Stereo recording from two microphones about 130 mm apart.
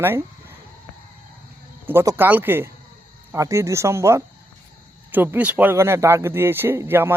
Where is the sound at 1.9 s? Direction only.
15° right (ahead or behind).